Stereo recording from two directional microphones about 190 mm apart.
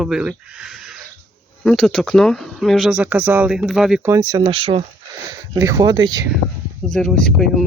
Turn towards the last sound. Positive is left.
turn(degrees=0)  # may be behind; listen again after turning